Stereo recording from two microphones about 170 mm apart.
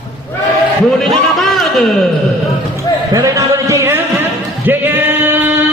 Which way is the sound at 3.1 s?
20° right (ahead or behind).